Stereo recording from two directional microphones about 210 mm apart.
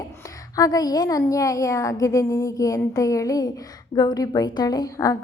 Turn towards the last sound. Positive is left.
turn(degrees=15)  # may be behind; listen again after turning